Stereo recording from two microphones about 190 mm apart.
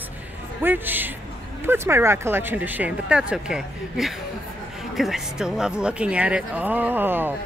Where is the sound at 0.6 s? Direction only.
10° right (ahead or behind).